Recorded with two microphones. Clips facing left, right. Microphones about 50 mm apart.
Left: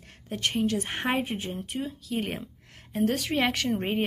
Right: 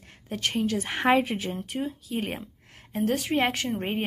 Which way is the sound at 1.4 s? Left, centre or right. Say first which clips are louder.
Right 2 dB; right.